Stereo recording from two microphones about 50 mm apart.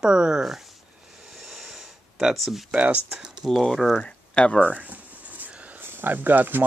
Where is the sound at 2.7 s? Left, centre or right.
Right.